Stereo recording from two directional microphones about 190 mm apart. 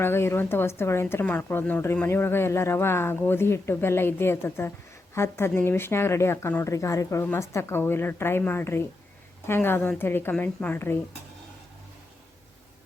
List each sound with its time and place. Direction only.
0.0 s a woman's voice: 10° left (ahead or behind)